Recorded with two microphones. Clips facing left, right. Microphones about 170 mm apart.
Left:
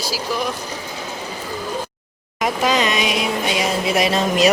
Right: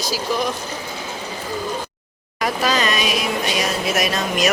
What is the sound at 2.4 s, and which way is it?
Speech, 20° left (ahead or behind).